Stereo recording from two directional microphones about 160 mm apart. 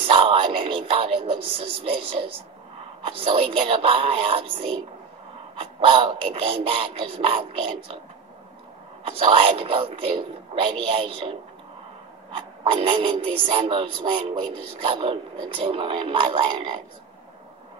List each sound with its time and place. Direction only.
0.0 s a sound: 35° right (ahead or behind)
3.0 s speech: 35° right (ahead or behind)
9.0 s speech: 35° right (ahead or behind)